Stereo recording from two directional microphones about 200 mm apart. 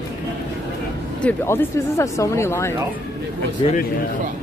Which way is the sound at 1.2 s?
10° left (ahead or behind).